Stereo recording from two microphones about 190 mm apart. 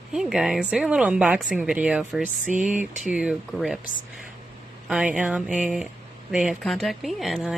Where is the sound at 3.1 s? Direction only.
5° right (ahead or behind).